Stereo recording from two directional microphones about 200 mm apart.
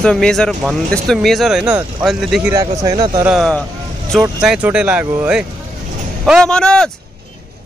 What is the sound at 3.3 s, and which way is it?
Speech, centre (ahead or behind).